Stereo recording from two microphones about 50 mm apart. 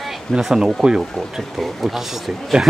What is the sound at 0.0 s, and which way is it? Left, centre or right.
Speech, centre.